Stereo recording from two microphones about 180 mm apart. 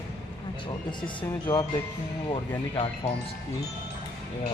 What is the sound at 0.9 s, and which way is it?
Speech, 25° left (ahead or behind).